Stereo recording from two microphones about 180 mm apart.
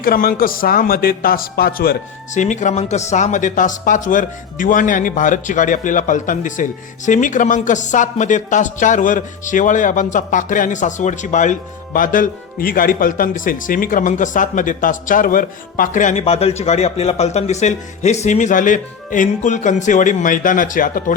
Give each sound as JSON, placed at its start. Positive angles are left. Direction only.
{"t": 0.0, "sound": "a man's voice", "side_deg": 55}
{"t": 2.3, "sound": "speech", "side_deg": 40}